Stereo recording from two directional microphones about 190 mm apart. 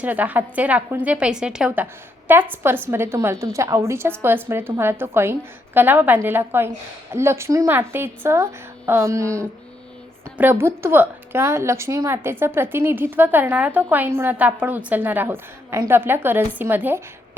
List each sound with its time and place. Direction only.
0.0 s a woman's voice: 10° right (ahead or behind)